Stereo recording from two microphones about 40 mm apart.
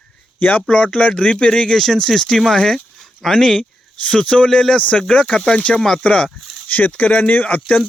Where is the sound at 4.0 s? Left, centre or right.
Left.